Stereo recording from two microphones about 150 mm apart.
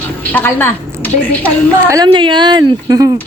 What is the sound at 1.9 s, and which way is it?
Speech, 25° right (ahead or behind).